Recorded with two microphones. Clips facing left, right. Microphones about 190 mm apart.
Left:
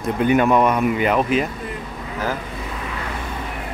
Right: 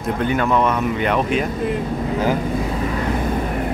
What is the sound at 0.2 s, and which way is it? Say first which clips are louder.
Speech: left 3 dB; 15° left (ahead or behind).